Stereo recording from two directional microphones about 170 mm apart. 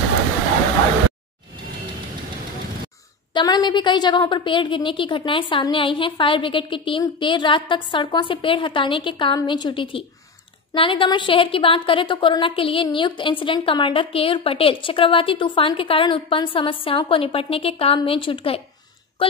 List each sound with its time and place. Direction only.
3.3 s a woman's voice: 25° left (ahead or behind)